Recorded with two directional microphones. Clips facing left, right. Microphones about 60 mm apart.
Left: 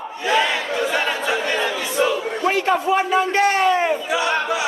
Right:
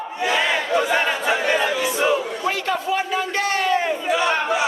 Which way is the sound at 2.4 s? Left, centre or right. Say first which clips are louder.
Left 4 dB; left.